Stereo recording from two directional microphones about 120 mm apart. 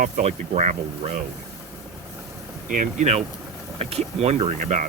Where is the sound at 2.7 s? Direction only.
90° right.